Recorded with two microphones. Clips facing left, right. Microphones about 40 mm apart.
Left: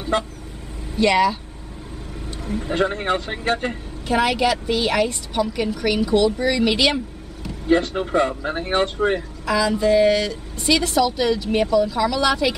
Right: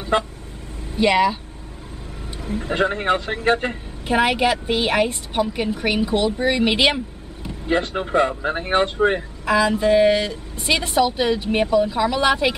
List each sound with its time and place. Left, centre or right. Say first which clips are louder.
0.9 s a man's voice: even; centre
2.4 s a man's voice: right 1 dB; centre
7.6 s a man's voice: left 3 dB; centre
9.5 s speech: right 1 dB; right